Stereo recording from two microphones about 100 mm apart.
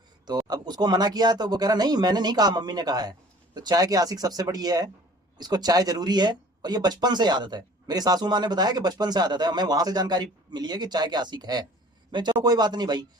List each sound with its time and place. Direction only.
0.3 s speech: 40° right (ahead or behind)